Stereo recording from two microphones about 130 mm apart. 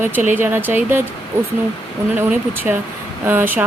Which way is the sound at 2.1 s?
10° right (ahead or behind).